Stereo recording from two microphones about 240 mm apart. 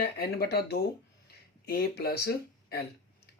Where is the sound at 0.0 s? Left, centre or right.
Left.